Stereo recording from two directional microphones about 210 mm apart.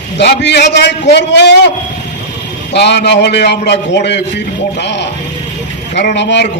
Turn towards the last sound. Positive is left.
turn(degrees=55)  # may be behind; listen again after turning